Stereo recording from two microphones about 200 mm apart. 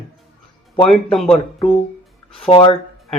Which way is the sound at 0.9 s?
Centre (ahead or behind).